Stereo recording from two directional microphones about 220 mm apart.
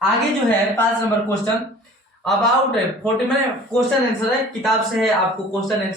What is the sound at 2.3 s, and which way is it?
Speech, centre (ahead or behind).